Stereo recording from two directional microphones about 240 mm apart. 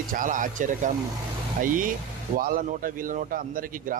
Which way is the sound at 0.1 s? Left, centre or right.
Right.